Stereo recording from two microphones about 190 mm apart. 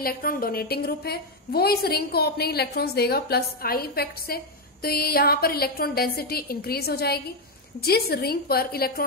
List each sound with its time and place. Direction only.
0.0 s a woman's voice: 50° left (ahead or behind)